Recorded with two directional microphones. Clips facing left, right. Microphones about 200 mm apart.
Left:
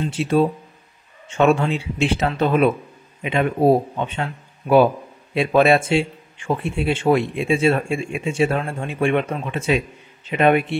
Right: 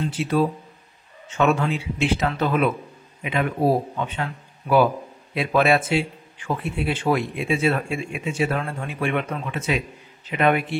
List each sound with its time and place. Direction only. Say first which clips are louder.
0.1 s speech: left 6 dB; 25° left (ahead or behind)